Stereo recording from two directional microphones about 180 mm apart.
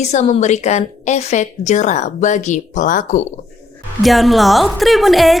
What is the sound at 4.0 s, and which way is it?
A woman's voice, centre (ahead or behind).